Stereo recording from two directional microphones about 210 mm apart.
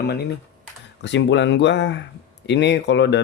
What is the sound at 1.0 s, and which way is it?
Speech, 60° left (ahead or behind).